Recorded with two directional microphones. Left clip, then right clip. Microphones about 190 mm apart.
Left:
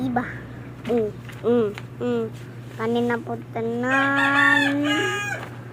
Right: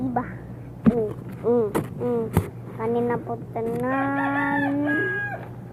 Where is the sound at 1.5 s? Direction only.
40° left (ahead or behind).